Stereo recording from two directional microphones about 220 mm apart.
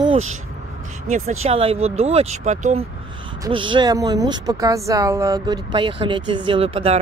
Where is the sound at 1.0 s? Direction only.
30° right (ahead or behind).